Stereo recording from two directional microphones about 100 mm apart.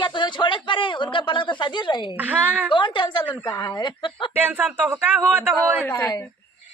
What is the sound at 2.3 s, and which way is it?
Speech, 15° right (ahead or behind).